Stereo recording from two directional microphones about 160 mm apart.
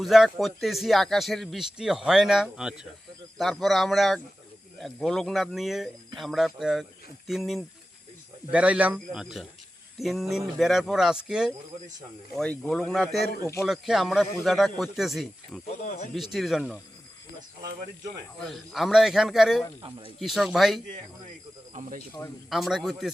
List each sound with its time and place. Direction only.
0.0 s a man's voice: centre (ahead or behind)
15.8 s speech: 50° left (ahead or behind)
16.1 s speech: centre (ahead or behind)
18.4 s speech: centre (ahead or behind)
21.7 s speech: 50° right (ahead or behind)
22.4 s speech: centre (ahead or behind)